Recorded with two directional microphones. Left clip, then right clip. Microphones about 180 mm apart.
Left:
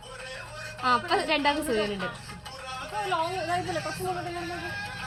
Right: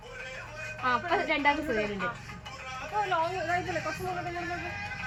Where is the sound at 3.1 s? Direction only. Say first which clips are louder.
Left 3 dB; 25° left (ahead or behind).